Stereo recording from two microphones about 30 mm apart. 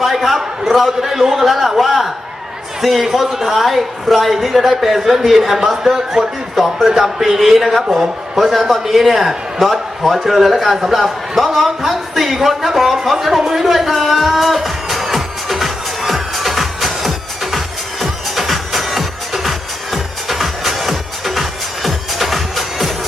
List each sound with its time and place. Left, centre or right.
0.0 s a sound: centre
0.7 s a man's voice: centre
7.7 s a man's voice: centre
13.7 s music: centre